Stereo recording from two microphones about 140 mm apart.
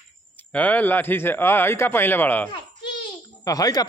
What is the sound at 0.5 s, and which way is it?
A man's voice, 10° left (ahead or behind).